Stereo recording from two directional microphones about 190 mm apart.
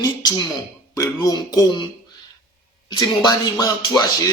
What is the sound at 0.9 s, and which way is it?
Speech, 20° left (ahead or behind).